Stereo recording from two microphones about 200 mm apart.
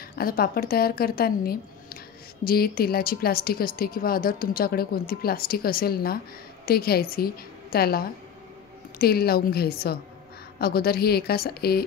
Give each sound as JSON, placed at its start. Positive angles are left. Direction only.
{"t": 0.1, "sound": "a woman's voice", "side_deg": 50}